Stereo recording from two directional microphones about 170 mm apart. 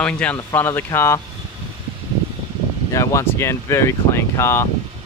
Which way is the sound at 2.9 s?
20° left (ahead or behind).